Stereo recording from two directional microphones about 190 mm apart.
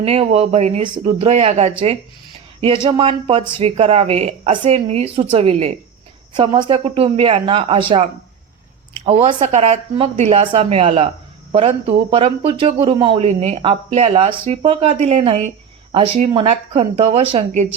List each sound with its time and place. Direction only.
0.0 s speech: 30° right (ahead or behind)
9.0 s speech: 35° right (ahead or behind)